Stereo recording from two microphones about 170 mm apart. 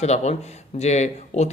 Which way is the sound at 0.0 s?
40° left (ahead or behind).